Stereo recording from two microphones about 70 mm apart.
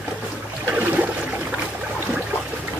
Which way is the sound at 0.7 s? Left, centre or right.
Right.